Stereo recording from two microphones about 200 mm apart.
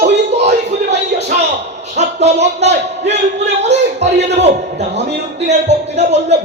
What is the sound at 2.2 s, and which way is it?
A man's voice, 35° right (ahead or behind).